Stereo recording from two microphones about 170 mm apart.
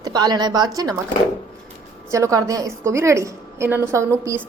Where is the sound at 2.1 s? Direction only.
20° right (ahead or behind).